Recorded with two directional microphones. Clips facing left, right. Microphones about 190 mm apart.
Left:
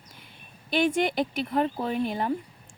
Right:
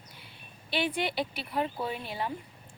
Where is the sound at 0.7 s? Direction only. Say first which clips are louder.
Left 7 dB; 45° left (ahead or behind).